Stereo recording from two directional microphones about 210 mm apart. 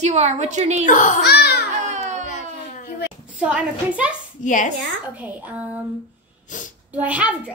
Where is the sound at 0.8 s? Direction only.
40° left (ahead or behind).